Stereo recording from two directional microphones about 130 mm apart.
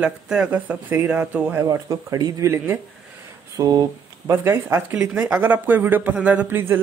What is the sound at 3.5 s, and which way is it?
Speech, 30° right (ahead or behind).